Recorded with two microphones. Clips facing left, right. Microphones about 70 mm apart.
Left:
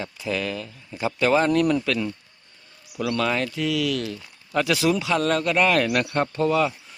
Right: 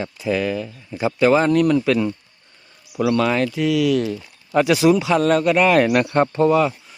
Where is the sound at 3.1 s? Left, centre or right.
Centre.